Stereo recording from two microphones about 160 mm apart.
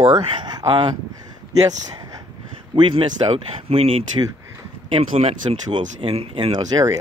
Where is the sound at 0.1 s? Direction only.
30° right (ahead or behind).